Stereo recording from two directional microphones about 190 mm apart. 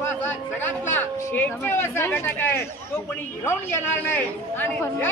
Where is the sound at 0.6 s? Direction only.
10° left (ahead or behind).